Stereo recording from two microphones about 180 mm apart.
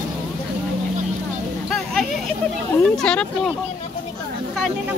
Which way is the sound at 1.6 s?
Centre (ahead or behind).